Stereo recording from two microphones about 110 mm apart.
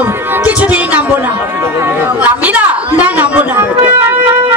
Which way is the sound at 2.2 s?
15° right (ahead or behind).